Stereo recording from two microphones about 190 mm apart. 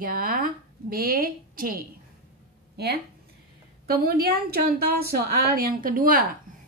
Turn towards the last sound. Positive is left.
turn(degrees=-50)  # may be behind; listen again after turning